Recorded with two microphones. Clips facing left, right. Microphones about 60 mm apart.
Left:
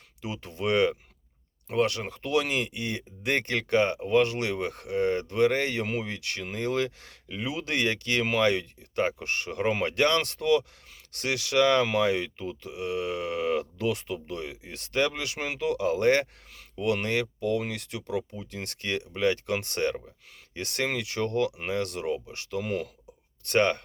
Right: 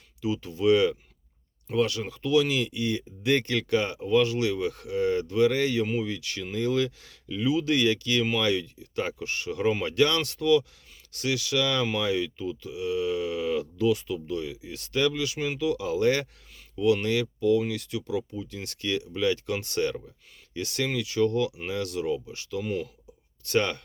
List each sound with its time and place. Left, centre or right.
0.2 s speech: left
23.5 s speech: left